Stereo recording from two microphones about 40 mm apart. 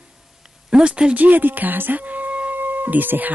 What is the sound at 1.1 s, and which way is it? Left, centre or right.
Speech, right.